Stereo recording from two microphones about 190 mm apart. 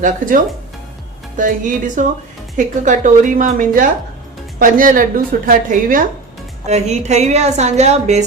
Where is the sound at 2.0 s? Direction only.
45° right (ahead or behind).